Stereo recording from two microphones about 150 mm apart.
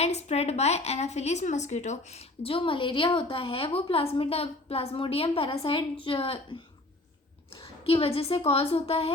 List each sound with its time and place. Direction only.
0.0 s a woman's voice: 45° left (ahead or behind)
7.6 s a woman's voice: 40° left (ahead or behind)